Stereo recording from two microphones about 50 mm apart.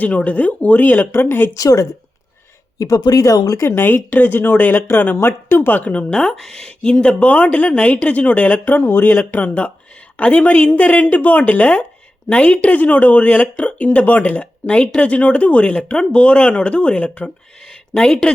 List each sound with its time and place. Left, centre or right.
0.0 s speech: left
2.8 s speech: left
3.7 s speech: left
5.8 s speech: left
8.4 s speech: left
9.4 s speech: left